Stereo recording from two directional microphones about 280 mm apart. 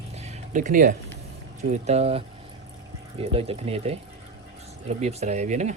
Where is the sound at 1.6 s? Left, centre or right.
Right.